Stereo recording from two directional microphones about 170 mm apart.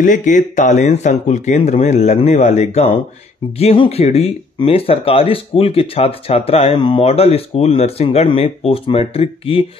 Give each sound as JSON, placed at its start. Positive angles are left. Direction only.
{"t": 0.0, "sound": "speech", "side_deg": 50}